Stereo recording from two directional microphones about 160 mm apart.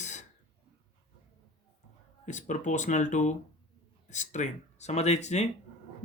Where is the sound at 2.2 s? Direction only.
50° left (ahead or behind).